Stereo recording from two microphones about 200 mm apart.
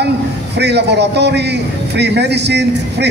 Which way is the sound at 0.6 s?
60° right (ahead or behind).